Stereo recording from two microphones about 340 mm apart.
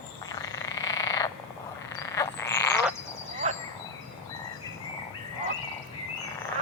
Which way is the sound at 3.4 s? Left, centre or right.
Right.